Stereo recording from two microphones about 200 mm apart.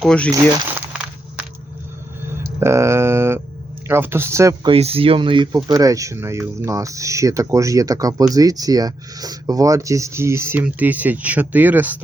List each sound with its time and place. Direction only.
0.0 s speech: 5° left (ahead or behind)
2.4 s a sound: 15° right (ahead or behind)
3.8 s speech: 10° right (ahead or behind)
4.7 s speech: 30° right (ahead or behind); by 12.0 s 10° right (ahead or behind)